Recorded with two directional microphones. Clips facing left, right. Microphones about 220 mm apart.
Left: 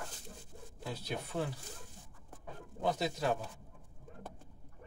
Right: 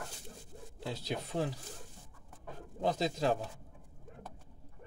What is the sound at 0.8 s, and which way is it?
Speech, 20° right (ahead or behind).